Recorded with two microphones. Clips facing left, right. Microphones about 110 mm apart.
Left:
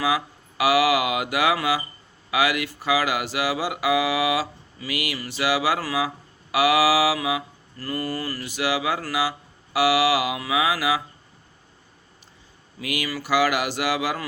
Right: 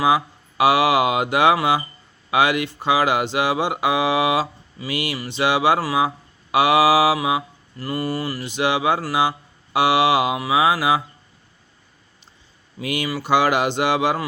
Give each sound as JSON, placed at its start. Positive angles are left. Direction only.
{"t": 0.0, "sound": "speech", "side_deg": -25}
{"t": 12.8, "sound": "speech", "side_deg": -25}